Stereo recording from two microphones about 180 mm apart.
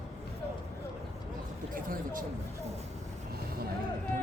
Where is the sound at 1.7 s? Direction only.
50° right (ahead or behind).